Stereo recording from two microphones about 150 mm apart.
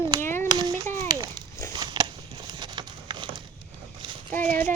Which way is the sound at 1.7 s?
30° right (ahead or behind).